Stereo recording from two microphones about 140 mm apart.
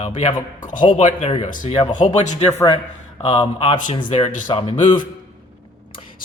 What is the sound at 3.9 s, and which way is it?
Speech, 45° left (ahead or behind).